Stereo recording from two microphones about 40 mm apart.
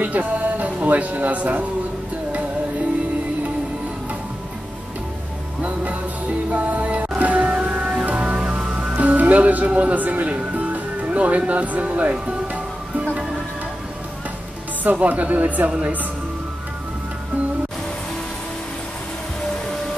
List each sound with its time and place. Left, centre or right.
0.0 s speech: right
6.5 s music: right
8.4 s music: right
8.9 s music: right
9.7 s speech: right
14.8 s speech: right